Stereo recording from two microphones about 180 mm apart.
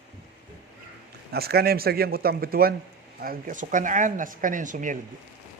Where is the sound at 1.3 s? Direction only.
60° right (ahead or behind); by 4.9 s 45° right (ahead or behind).